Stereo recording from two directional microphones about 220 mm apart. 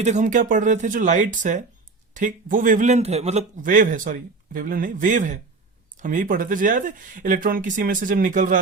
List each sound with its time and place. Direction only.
0.0 s a man's voice: 35° right (ahead or behind)